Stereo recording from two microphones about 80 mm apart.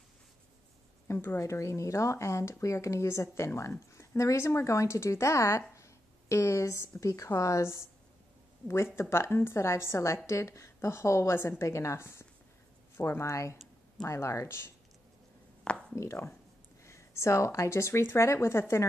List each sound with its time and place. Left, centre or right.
1.0 s speech: left
15.6 s a sound: centre
16.0 s speech: left